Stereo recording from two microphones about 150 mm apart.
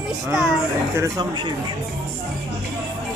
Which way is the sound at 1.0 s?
20° right (ahead or behind).